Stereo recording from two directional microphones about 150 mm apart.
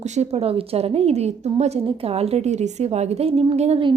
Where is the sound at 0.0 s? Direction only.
50° right (ahead or behind).